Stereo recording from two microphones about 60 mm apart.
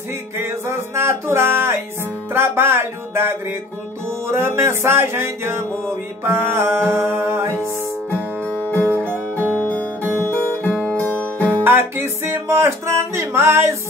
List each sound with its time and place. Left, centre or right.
0.4 s music: right
8.6 s music: left
10.1 s music: left
10.7 s music: centre
11.1 s music: left
11.6 s music: right
12.4 s music: right